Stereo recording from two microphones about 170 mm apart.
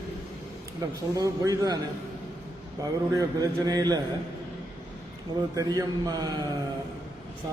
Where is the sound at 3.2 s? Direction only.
20° right (ahead or behind).